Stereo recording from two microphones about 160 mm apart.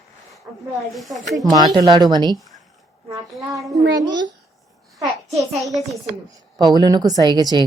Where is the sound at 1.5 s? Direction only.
25° right (ahead or behind).